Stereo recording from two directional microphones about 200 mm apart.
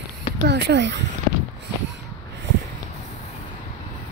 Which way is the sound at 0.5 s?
60° right (ahead or behind).